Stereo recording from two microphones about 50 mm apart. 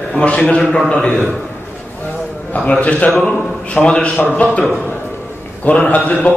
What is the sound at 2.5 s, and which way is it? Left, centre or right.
Speech, left.